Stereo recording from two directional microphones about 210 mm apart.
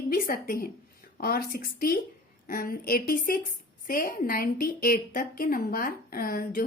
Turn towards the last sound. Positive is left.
turn(degrees=45)  # may be behind; listen again after turning